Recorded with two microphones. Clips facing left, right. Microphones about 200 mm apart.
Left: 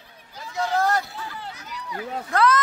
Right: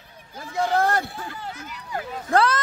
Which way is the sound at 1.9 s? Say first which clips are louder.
Right 3 dB; 30° right (ahead or behind).